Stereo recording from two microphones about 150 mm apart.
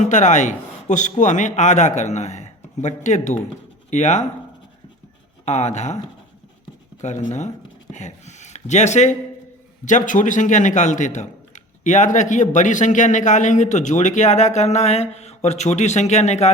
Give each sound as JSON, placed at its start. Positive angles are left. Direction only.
{"t": 0.0, "sound": "a man's voice", "side_deg": 55}
{"t": 5.5, "sound": "a man's voice", "side_deg": 45}
{"t": 7.0, "sound": "a man's voice", "side_deg": 50}